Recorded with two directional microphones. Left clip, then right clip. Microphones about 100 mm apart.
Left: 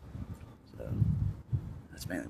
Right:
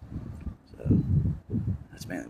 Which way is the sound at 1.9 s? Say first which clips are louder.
Right 1 dB; 15° left (ahead or behind).